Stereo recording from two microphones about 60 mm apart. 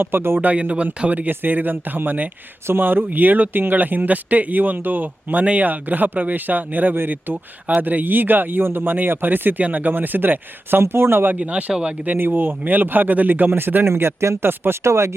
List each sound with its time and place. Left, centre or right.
0.0 s speech: right
0.4 s speech: right
11.3 s speech: right
12.0 s speech: right
13.9 s speech: right